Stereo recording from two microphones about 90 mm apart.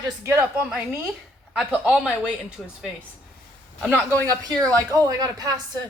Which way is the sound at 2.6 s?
5° left (ahead or behind).